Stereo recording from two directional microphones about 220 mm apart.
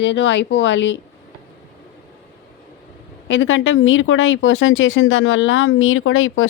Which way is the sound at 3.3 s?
60° left (ahead or behind).